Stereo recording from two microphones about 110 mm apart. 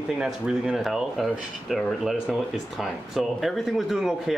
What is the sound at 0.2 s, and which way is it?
Speech, 5° right (ahead or behind).